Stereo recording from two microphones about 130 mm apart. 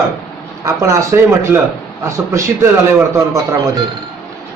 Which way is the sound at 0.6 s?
25° right (ahead or behind).